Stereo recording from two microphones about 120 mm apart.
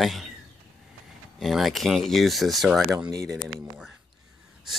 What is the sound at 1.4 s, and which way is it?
Speech, centre (ahead or behind).